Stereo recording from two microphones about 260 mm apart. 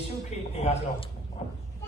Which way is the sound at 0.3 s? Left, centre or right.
Left.